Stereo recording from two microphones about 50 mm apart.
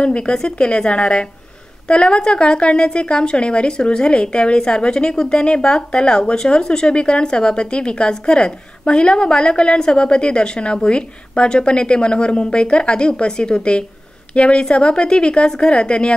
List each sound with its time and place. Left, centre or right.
0.0 s a woman's voice: centre